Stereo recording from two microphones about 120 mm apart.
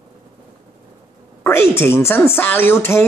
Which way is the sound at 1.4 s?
20° left (ahead or behind).